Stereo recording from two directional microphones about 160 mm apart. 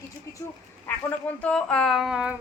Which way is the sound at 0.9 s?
10° left (ahead or behind).